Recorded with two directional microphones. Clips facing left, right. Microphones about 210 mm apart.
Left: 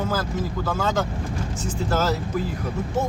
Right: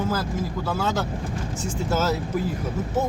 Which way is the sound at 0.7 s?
5° right (ahead or behind).